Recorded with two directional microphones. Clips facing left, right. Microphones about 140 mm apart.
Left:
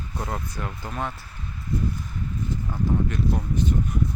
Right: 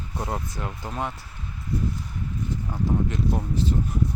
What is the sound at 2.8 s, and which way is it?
Speech, 25° right (ahead or behind).